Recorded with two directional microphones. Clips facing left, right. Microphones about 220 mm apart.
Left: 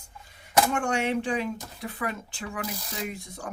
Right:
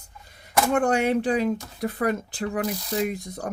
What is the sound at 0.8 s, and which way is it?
Speech, 35° right (ahead or behind).